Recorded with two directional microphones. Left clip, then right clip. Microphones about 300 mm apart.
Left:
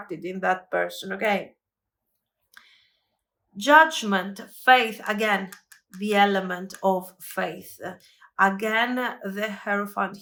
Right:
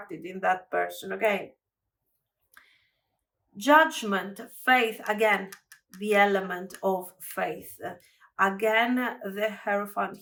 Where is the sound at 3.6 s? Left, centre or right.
Centre.